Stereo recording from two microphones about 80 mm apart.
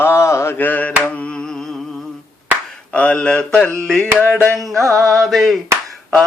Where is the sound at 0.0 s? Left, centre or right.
Left.